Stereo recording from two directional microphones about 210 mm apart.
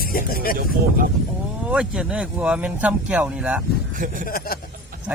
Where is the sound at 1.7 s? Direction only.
5° right (ahead or behind).